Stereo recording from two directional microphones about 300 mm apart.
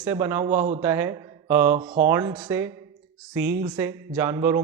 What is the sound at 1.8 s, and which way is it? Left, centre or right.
Speech, right.